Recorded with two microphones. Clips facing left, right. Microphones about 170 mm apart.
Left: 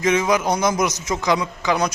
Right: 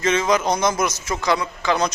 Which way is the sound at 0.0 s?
10° left (ahead or behind).